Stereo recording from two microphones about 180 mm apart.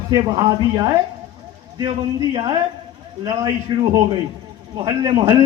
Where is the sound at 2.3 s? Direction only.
25° right (ahead or behind).